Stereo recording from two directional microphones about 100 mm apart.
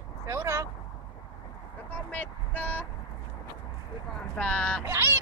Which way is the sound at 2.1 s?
15° left (ahead or behind).